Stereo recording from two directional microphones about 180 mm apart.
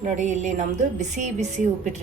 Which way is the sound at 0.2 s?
40° right (ahead or behind).